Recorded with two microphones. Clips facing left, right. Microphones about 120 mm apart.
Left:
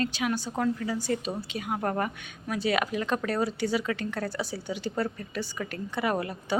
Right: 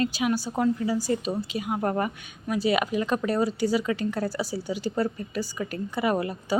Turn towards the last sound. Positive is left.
turn(degrees=0)  # may be behind; listen again after turning